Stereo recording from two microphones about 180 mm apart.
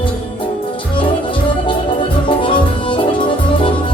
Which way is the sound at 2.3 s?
30° left (ahead or behind).